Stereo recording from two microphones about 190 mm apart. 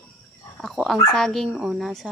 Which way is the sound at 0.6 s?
Centre (ahead or behind).